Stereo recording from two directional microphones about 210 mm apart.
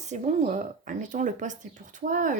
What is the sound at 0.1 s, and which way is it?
Speech, 35° right (ahead or behind).